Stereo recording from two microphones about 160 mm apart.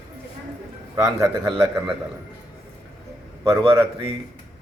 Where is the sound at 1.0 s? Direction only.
20° right (ahead or behind).